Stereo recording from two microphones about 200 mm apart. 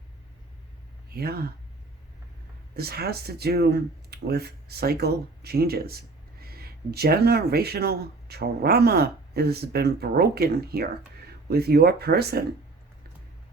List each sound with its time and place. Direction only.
1.1 s speech: 50° right (ahead or behind)
2.7 s speech: 50° right (ahead or behind)